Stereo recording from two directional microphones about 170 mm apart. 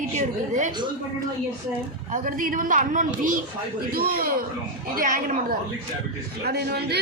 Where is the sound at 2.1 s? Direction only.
55° right (ahead or behind).